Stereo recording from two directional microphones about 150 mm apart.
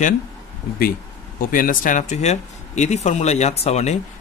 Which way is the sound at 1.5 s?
65° left (ahead or behind).